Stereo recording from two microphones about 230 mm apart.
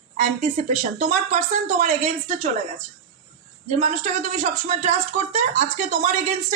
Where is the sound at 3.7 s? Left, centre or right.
Right.